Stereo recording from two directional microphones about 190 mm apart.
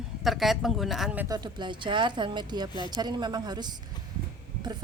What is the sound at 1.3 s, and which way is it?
A woman's voice, 20° right (ahead or behind).